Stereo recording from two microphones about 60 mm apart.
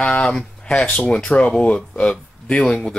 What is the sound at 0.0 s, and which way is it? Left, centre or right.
Speech, centre.